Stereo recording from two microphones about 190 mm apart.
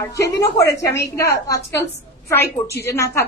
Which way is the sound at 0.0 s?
15° left (ahead or behind).